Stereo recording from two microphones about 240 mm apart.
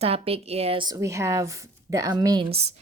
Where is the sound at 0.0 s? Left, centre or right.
Right.